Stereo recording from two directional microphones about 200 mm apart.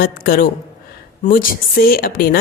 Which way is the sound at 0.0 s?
45° left (ahead or behind).